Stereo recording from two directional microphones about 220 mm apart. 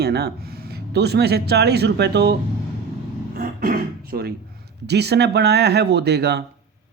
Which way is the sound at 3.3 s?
40° right (ahead or behind).